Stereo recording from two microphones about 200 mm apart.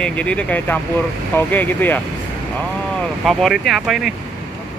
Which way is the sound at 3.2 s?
Centre (ahead or behind).